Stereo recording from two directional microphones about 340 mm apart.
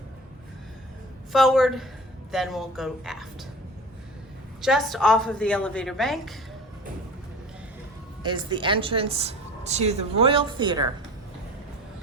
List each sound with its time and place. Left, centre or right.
1.3 s a woman's voice: centre
4.6 s a woman's voice: centre
8.2 s a woman's voice: centre